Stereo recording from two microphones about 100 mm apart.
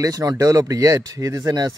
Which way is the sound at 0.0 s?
35° right (ahead or behind).